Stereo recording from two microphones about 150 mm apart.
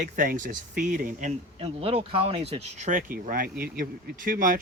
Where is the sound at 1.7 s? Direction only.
40° right (ahead or behind).